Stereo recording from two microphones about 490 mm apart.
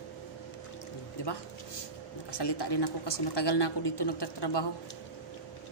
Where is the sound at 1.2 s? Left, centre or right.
Left.